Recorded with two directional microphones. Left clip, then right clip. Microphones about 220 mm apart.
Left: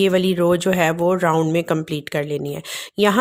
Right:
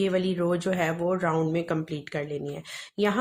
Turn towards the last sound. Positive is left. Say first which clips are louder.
# left 9 dB
turn(degrees=40)  # may be behind; listen again after turning